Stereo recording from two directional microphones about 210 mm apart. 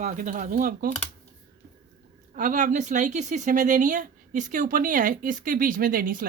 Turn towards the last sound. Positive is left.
turn(degrees=-40)  # may be behind; listen again after turning